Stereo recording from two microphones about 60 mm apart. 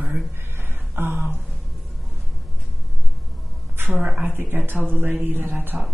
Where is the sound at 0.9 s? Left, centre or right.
Right.